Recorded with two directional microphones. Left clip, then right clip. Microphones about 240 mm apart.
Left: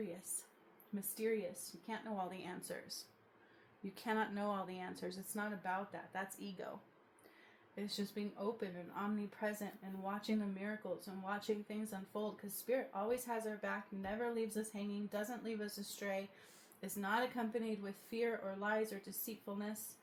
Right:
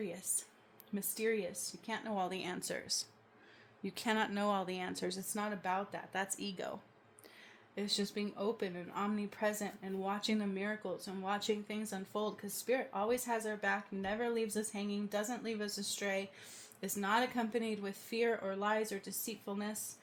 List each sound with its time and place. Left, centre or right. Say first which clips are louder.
0.9 s speech: right 4 dB; right
7.8 s speech: right 7 dB; right